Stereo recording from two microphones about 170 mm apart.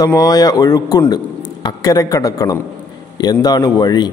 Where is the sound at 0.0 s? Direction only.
20° left (ahead or behind).